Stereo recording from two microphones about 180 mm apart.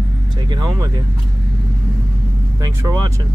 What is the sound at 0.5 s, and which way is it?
Speech, 25° right (ahead or behind).